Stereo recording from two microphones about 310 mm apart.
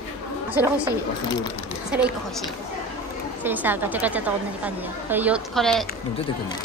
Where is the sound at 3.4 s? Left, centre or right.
Centre.